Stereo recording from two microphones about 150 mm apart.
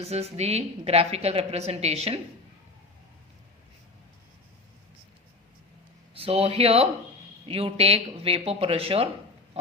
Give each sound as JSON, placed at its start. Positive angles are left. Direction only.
{"t": 0.0, "sound": "a woman's voice", "side_deg": -45}
{"t": 6.1, "sound": "speech", "side_deg": -40}